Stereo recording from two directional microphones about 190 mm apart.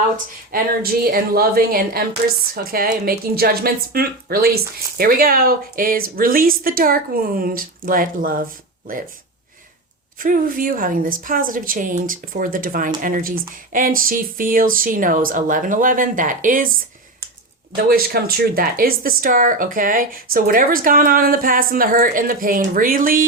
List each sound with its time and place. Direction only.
0.5 s speech: 50° right (ahead or behind)
10.2 s speech: 45° right (ahead or behind)
17.7 s speech: 50° right (ahead or behind)